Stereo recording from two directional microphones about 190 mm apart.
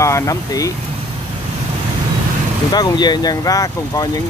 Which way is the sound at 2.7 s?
20° left (ahead or behind).